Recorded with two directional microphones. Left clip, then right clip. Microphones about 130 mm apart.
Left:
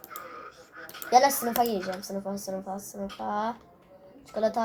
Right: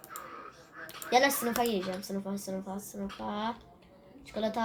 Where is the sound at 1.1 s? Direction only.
35° right (ahead or behind).